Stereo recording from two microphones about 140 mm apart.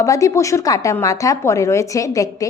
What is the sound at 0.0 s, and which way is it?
A woman's voice, 20° left (ahead or behind).